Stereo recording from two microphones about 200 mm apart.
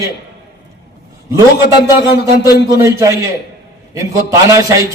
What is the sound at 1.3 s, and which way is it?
A man's voice, 15° right (ahead or behind).